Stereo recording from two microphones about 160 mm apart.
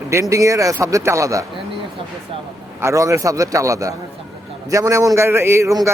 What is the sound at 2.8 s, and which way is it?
Speech, 20° right (ahead or behind).